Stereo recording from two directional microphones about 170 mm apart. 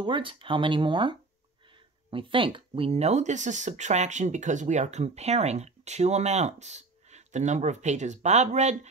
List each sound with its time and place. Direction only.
0.0 s speech: 30° right (ahead or behind)